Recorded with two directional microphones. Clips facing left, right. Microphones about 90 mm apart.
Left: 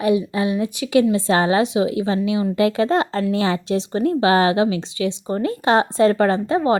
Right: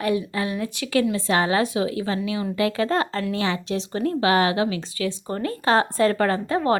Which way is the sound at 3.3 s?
35° left (ahead or behind).